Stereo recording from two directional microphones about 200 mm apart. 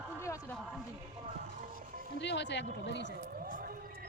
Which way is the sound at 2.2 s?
60° left (ahead or behind).